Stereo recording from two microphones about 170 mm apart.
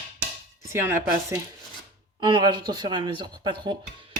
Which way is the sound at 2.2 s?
25° right (ahead or behind).